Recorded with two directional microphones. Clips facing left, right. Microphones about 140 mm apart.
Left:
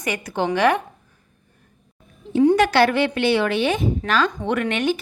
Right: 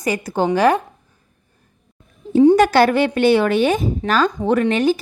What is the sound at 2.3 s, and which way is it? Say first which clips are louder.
A woman's voice: right 4 dB; 40° right (ahead or behind).